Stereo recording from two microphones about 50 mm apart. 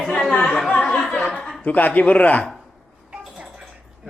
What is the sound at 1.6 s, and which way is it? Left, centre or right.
Speech, left.